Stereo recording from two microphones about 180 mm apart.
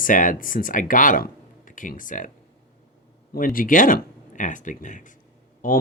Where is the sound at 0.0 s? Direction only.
50° left (ahead or behind).